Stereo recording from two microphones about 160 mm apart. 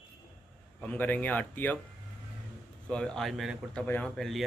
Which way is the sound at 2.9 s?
5° left (ahead or behind).